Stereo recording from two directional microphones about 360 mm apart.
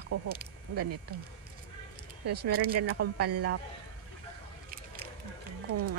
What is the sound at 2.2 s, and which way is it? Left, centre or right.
Speech, right.